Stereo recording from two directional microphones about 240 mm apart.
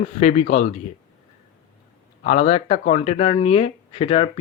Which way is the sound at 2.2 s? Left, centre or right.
Left.